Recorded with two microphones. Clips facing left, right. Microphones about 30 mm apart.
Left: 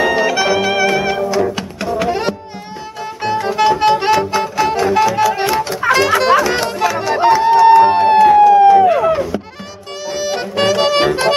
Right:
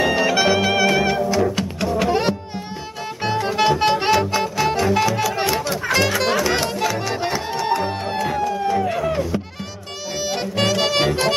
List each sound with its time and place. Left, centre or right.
0.0 s brass instrument: centre
1.3 s music: centre
3.2 s music: centre
7.4 s music: left
7.8 s music: left
8.6 s a sound: left
10.1 s music: centre